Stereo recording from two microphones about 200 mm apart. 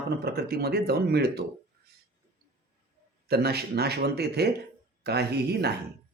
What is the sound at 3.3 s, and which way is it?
Speech, 55° right (ahead or behind).